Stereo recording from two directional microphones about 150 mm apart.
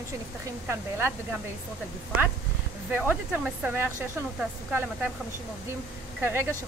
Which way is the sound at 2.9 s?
10° right (ahead or behind).